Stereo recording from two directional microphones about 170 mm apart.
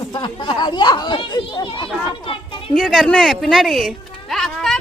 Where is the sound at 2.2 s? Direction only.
30° left (ahead or behind).